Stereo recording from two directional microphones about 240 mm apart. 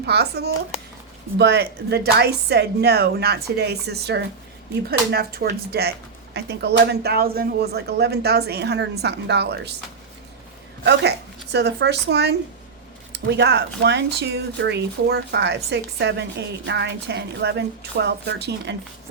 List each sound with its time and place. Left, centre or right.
0.0 s speech: right
11.5 s speech: right